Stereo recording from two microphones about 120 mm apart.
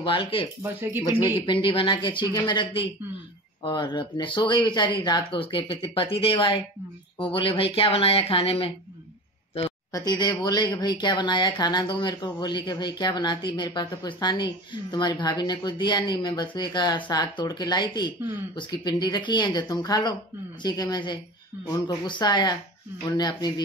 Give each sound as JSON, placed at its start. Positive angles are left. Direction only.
{"t": 0.0, "sound": "speech", "side_deg": 45}
{"t": 0.6, "sound": "speech", "side_deg": -15}
{"t": 1.4, "sound": "speech", "side_deg": 45}
{"t": 9.9, "sound": "speech", "side_deg": 35}